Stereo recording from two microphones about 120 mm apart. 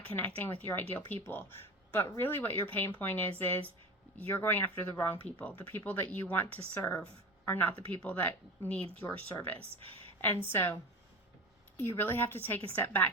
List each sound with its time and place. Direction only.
0.0 s speech: 15° left (ahead or behind)
10.2 s speech: 15° left (ahead or behind)
11.8 s speech: 20° left (ahead or behind)